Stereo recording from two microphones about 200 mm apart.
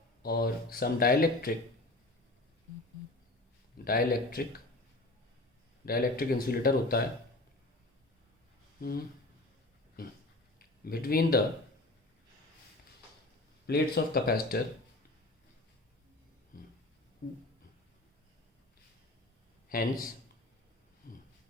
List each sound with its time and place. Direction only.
0.2 s speech: 50° left (ahead or behind)
3.8 s speech: 45° left (ahead or behind)
5.8 s speech: 50° left (ahead or behind)
8.8 s speech: 50° left (ahead or behind)
13.7 s speech: 55° left (ahead or behind)
19.6 s a man's voice: 45° left (ahead or behind)
21.0 s a sound: 45° left (ahead or behind)